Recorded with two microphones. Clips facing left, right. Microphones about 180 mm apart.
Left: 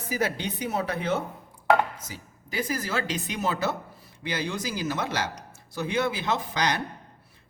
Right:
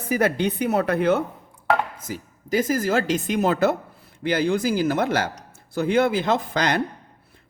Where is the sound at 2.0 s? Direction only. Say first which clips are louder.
Right 9 dB; 45° right (ahead or behind).